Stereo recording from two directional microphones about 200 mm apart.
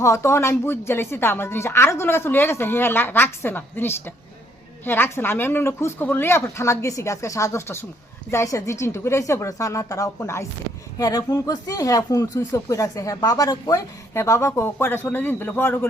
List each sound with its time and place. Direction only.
0.0 s speech: 15° left (ahead or behind)